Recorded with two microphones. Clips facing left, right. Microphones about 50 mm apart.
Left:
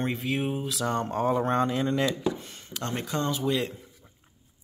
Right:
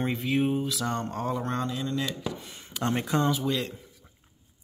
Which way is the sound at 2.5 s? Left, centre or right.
Centre.